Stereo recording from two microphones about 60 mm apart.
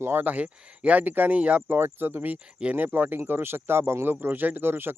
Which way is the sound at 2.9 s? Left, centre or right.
Right.